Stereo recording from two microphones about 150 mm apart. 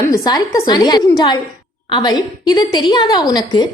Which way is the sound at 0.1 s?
25° left (ahead or behind).